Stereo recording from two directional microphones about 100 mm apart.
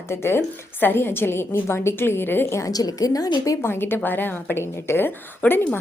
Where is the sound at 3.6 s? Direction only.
25° left (ahead or behind).